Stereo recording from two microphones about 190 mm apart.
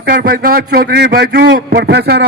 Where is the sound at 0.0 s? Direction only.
55° right (ahead or behind).